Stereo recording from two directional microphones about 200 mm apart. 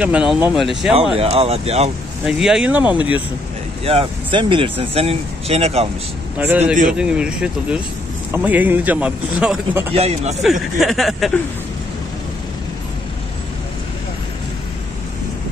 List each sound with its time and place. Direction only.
0.0 s speech: 5° right (ahead or behind)
1.1 s speech: 30° right (ahead or behind)
2.2 s speech: 5° right (ahead or behind)
3.8 s speech: 25° right (ahead or behind)
6.3 s a man's voice: 10° right (ahead or behind)
9.9 s speech: 30° right (ahead or behind)
10.4 s speech: centre (ahead or behind)